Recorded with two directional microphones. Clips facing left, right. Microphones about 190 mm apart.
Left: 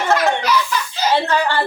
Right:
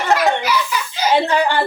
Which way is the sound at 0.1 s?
15° right (ahead or behind).